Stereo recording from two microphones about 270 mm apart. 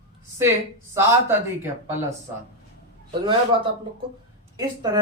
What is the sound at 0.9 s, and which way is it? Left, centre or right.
Speech, centre.